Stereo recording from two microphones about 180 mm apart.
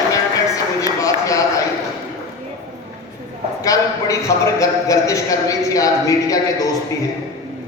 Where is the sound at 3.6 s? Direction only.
15° left (ahead or behind).